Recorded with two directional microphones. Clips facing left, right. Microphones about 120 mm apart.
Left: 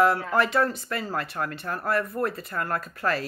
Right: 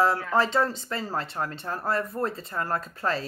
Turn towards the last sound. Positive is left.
turn(degrees=-25)  # may be behind; listen again after turning